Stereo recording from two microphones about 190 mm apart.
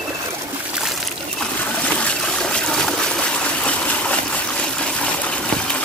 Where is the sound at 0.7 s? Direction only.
Centre (ahead or behind).